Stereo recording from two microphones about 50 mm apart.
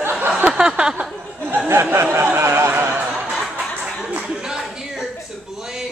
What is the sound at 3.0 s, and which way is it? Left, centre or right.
Snicker, centre.